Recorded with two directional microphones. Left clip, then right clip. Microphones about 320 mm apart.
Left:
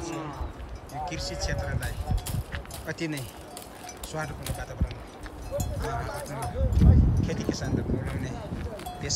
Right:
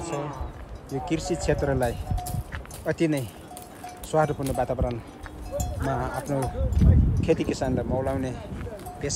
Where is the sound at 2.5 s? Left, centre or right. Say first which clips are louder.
Right 8 dB; centre.